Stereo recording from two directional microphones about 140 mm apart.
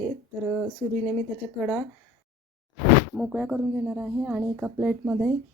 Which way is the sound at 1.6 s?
5° right (ahead or behind).